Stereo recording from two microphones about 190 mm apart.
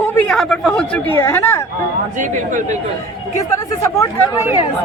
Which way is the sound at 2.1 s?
40° right (ahead or behind).